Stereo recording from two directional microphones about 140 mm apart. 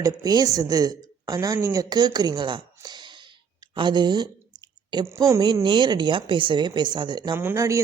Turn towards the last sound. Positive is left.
turn(degrees=-20)  # may be behind; listen again after turning